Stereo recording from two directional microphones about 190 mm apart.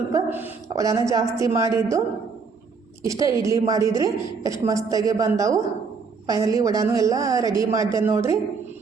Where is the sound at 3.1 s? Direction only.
15° right (ahead or behind).